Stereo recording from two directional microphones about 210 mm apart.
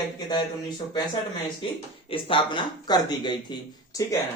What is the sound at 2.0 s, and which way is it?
Speech, 25° left (ahead or behind).